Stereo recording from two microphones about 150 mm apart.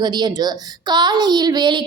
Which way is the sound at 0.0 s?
30° right (ahead or behind).